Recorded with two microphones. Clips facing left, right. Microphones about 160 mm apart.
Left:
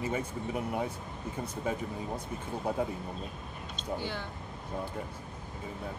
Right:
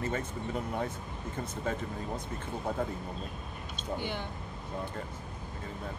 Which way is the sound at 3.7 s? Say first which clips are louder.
Even; 15° right (ahead or behind).